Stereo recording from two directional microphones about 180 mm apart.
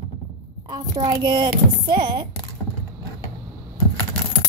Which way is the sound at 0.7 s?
20° right (ahead or behind).